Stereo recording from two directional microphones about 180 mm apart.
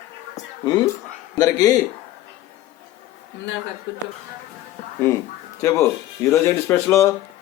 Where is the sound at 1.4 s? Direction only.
20° left (ahead or behind).